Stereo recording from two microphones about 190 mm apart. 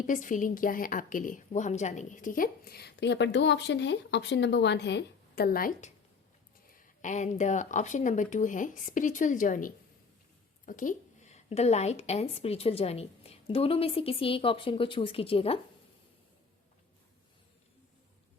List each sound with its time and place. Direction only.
0.0 s a woman's voice: 45° left (ahead or behind)
7.0 s a woman's voice: 40° left (ahead or behind)